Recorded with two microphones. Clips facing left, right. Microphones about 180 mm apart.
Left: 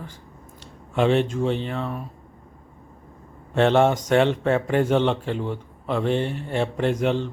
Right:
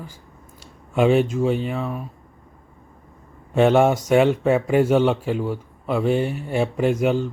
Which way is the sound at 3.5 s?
10° right (ahead or behind).